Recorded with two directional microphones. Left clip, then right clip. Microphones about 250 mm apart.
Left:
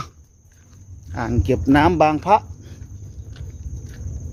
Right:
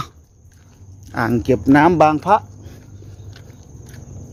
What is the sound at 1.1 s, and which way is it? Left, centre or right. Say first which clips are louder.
Speech: right 4 dB; right.